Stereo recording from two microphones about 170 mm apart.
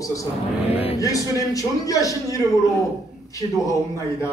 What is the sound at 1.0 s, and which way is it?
A man's voice, 20° left (ahead or behind).